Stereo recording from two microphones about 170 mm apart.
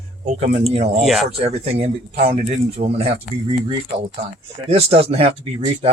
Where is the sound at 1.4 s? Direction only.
35° right (ahead or behind).